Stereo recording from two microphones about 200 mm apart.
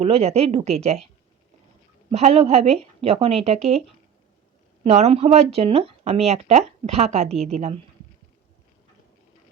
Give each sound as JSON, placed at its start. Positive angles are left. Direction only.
{"t": 0.0, "sound": "speech", "side_deg": -30}
{"t": 2.1, "sound": "speech", "side_deg": -30}